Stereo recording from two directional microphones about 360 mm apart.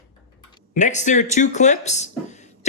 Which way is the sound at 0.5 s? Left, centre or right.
Centre.